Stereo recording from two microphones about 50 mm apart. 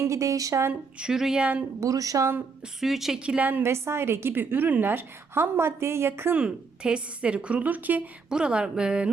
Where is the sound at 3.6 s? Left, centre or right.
Right.